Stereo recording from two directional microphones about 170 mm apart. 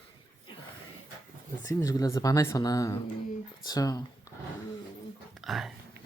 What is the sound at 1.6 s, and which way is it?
Speech, 20° left (ahead or behind).